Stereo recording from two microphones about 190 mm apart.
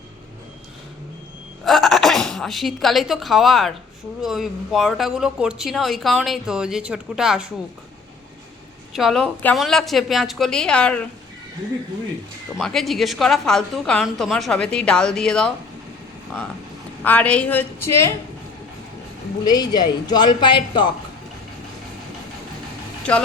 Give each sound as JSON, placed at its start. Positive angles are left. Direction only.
{"t": 1.6, "sound": "speech", "side_deg": 0}
{"t": 8.9, "sound": "speech", "side_deg": 0}
{"t": 12.5, "sound": "speech", "side_deg": 0}
{"t": 17.0, "sound": "a woman's voice", "side_deg": 10}
{"t": 19.5, "sound": "speech", "side_deg": 20}